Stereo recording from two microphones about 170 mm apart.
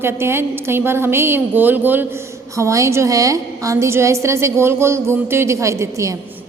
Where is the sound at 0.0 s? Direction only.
15° right (ahead or behind).